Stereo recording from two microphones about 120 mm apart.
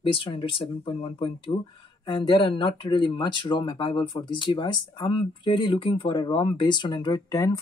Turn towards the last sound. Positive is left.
turn(degrees=25)  # may be behind; listen again after turning